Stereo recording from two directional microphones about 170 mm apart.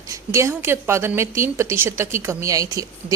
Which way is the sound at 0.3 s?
15° right (ahead or behind).